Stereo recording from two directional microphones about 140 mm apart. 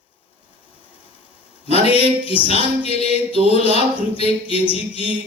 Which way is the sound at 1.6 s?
45° left (ahead or behind).